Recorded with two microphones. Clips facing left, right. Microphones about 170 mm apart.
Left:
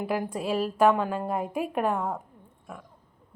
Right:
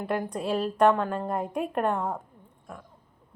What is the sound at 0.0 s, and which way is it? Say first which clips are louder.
A woman's voice: even; 5° left (ahead or behind).